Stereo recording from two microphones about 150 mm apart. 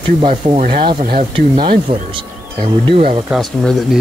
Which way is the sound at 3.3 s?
Centre (ahead or behind).